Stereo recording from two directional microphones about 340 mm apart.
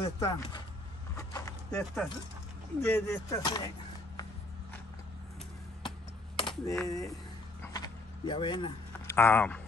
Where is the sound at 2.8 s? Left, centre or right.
Centre.